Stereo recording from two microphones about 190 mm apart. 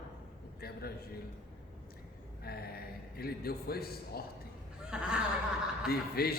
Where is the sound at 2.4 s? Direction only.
55° left (ahead or behind).